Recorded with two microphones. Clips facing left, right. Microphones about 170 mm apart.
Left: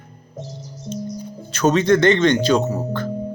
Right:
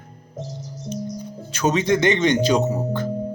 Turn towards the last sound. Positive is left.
turn(degrees=-20)  # may be behind; listen again after turning